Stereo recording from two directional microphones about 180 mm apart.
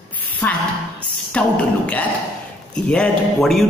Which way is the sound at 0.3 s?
10° left (ahead or behind).